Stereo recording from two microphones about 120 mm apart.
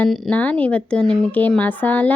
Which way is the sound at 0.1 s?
10° left (ahead or behind).